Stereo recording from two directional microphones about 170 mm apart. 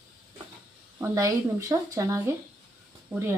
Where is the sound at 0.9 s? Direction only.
20° right (ahead or behind).